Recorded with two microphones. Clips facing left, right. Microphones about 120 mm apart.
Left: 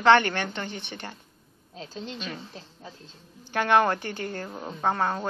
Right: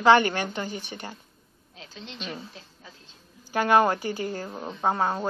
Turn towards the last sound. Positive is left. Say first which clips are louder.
# right 1 dB
turn(degrees=-10)  # may be behind; listen again after turning